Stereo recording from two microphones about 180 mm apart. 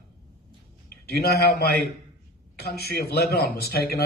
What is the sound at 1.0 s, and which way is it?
A man's voice, 60° left (ahead or behind).